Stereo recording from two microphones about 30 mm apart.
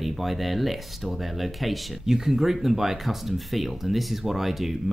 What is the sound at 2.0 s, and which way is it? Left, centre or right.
Speech, centre.